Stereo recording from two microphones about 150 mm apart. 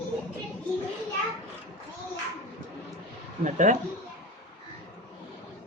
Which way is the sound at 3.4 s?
55° right (ahead or behind).